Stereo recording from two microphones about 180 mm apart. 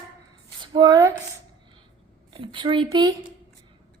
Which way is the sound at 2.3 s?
25° right (ahead or behind).